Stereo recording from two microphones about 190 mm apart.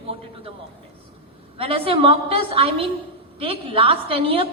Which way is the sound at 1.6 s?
30° right (ahead or behind).